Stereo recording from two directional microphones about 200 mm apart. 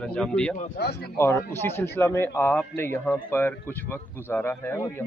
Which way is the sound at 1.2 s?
10° left (ahead or behind).